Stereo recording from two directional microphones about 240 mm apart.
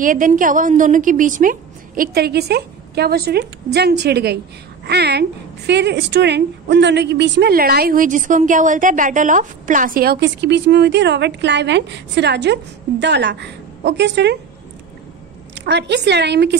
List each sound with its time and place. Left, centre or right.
0.0 s a woman's voice: right
15.5 s a woman's voice: right